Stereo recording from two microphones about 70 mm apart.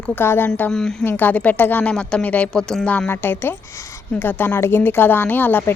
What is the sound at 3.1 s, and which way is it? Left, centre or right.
A woman's voice, left.